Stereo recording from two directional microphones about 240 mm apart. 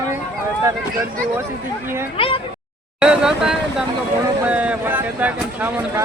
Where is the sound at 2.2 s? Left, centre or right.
Left.